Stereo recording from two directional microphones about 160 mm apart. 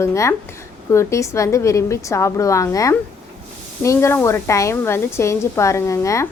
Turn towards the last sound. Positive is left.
turn(degrees=20)  # may be behind; listen again after turning